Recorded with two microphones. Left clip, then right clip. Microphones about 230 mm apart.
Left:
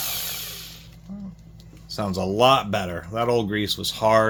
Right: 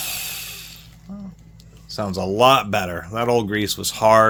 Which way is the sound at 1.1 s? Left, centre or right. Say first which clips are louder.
Right 2 dB; right.